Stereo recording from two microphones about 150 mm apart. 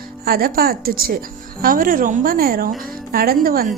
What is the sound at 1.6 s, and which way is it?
A woman's voice, 70° right (ahead or behind).